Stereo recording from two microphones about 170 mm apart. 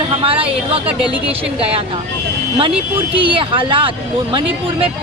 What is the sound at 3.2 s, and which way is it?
Speech, 30° right (ahead or behind).